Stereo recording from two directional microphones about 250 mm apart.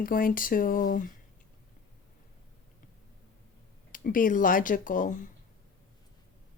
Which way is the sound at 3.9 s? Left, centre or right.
Left.